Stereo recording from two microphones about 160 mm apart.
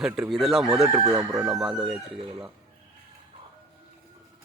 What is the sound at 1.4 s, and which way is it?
Speech, 5° right (ahead or behind).